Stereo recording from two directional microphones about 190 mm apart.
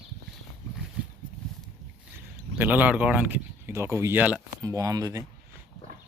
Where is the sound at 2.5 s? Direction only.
10° right (ahead or behind).